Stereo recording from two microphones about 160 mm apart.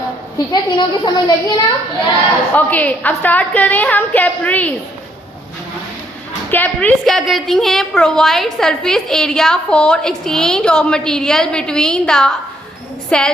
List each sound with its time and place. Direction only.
0.3 s a woman's voice: 25° left (ahead or behind)
2.6 s a woman's voice: 10° left (ahead or behind)
6.5 s a woman's voice: 10° left (ahead or behind)